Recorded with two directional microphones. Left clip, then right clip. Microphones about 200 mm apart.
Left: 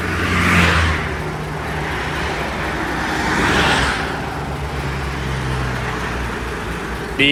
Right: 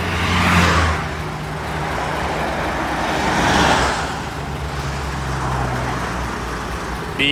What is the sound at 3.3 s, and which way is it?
Vehicle, 50° right (ahead or behind).